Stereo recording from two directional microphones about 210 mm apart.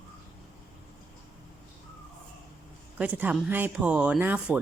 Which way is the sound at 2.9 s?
5° right (ahead or behind).